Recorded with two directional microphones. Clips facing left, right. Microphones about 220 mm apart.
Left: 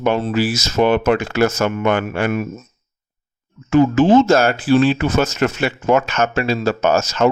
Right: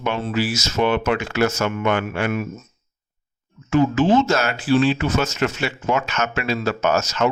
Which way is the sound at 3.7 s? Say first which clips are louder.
Left 5 dB; 50° left (ahead or behind).